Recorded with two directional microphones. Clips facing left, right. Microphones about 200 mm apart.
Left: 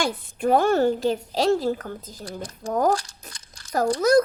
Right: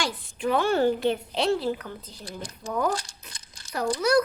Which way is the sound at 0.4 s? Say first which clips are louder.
Left 3 dB; 45° left (ahead or behind).